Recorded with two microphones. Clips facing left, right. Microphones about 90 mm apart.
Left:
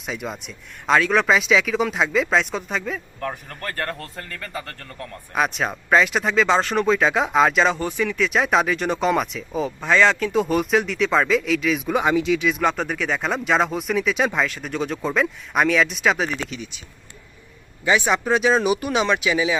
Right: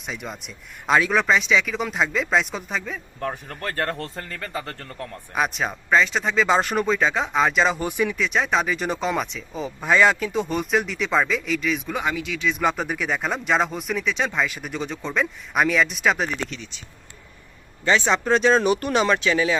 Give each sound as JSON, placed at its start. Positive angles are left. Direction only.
{"t": 0.0, "sound": "speech", "side_deg": 0}
{"t": 3.2, "sound": "speech", "side_deg": -15}
{"t": 5.3, "sound": "speech", "side_deg": 0}
{"t": 7.8, "sound": "speech", "side_deg": -15}
{"t": 8.1, "sound": "speech", "side_deg": 0}
{"t": 11.9, "sound": "speech", "side_deg": 20}
{"t": 12.5, "sound": "speech", "side_deg": 0}
{"t": 14.4, "sound": "speech", "side_deg": -5}
{"t": 17.8, "sound": "speech", "side_deg": 10}